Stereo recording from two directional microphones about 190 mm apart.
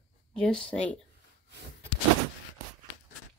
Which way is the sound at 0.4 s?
5° left (ahead or behind).